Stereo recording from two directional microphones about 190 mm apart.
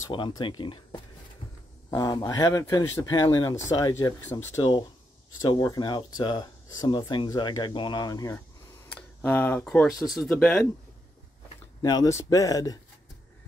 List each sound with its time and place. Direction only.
0.0 s speech: 25° left (ahead or behind)
1.9 s speech: 20° left (ahead or behind); by 10.6 s centre (ahead or behind)
11.8 s speech: 20° left (ahead or behind)